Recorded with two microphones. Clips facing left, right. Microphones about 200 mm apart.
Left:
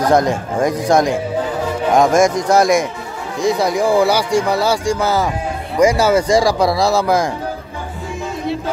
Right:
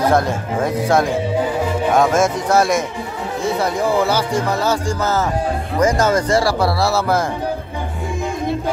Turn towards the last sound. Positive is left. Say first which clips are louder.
# left 3 dB
turn(degrees=15)  # may be behind; listen again after turning